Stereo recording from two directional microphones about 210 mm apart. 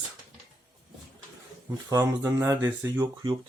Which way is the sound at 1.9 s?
15° right (ahead or behind).